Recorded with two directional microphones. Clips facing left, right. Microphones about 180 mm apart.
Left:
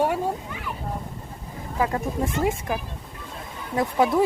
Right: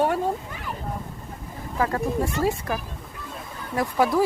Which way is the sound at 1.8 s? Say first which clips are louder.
Right 1 dB; 20° left (ahead or behind).